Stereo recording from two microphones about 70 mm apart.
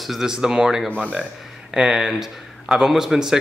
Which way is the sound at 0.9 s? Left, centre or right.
Centre.